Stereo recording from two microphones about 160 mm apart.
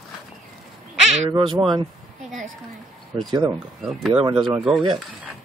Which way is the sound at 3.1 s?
30° right (ahead or behind).